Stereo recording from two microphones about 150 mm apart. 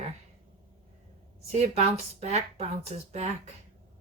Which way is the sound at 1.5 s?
45° right (ahead or behind).